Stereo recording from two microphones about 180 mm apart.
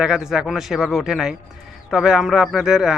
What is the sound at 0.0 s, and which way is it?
Speech, 5° right (ahead or behind).